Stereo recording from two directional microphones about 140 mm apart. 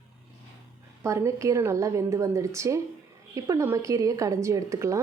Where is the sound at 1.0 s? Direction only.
20° right (ahead or behind).